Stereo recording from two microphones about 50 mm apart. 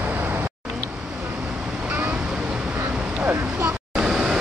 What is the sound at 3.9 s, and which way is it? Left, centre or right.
Vehicle, centre.